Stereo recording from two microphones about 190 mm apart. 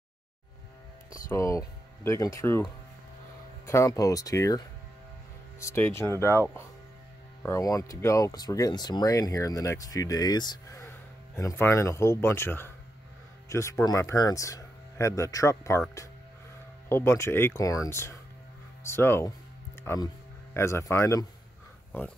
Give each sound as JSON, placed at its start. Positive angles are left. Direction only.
{"t": 1.3, "sound": "speech", "side_deg": 15}
{"t": 7.4, "sound": "speech", "side_deg": 15}
{"t": 16.9, "sound": "speech", "side_deg": 15}